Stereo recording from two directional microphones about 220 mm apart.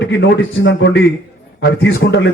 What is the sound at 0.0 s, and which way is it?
A man's voice, 55° left (ahead or behind).